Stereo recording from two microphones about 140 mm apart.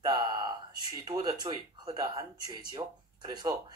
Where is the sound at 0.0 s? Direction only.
30° right (ahead or behind).